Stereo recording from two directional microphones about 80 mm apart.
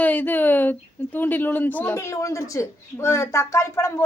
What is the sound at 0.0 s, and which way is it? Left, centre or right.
Speech, left.